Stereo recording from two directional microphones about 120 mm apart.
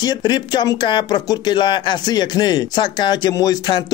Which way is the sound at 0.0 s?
35° left (ahead or behind).